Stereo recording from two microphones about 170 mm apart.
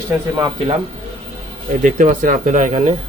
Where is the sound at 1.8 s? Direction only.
50° right (ahead or behind).